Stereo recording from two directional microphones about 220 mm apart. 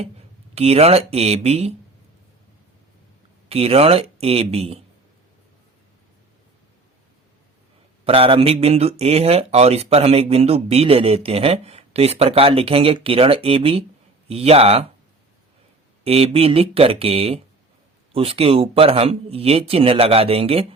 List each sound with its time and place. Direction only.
0.5 s speech: 30° right (ahead or behind)
3.5 s speech: 25° right (ahead or behind)
8.0 s speech: 25° right (ahead or behind)
16.0 s speech: 25° right (ahead or behind)